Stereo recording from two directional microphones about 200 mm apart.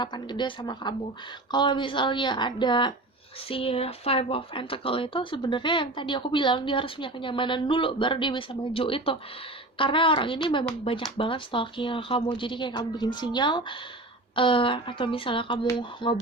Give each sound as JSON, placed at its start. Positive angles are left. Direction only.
{"t": 0.0, "sound": "speech", "side_deg": 20}